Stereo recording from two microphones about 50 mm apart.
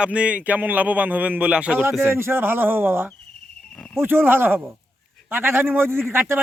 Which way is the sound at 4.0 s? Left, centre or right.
Right.